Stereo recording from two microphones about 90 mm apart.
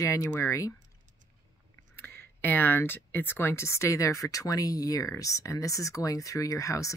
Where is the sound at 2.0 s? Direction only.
25° left (ahead or behind).